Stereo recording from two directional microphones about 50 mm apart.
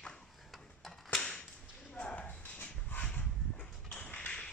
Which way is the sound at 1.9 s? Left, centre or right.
Left.